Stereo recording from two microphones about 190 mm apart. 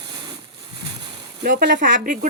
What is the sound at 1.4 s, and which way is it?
Speech, 60° right (ahead or behind).